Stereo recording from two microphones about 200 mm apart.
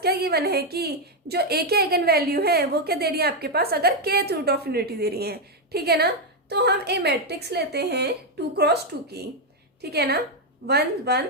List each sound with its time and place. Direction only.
0.0 s a woman's voice: 50° right (ahead or behind)